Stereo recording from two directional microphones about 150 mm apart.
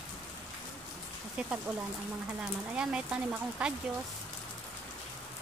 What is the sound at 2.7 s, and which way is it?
Speech, 10° right (ahead or behind).